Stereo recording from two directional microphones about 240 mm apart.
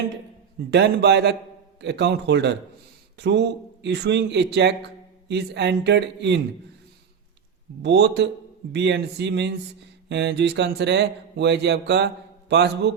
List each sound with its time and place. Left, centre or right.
0.7 s speech: right
7.8 s speech: right